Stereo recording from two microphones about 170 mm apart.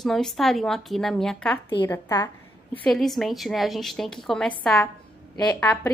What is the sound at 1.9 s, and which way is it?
Speech, 20° left (ahead or behind).